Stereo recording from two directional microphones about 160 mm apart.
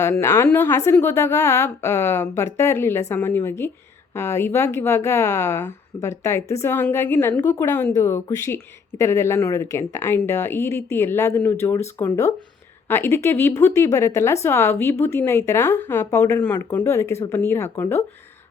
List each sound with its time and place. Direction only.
0.0 s a woman's voice: 15° left (ahead or behind)